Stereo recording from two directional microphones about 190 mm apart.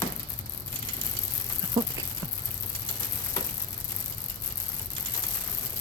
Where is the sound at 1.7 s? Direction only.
25° right (ahead or behind).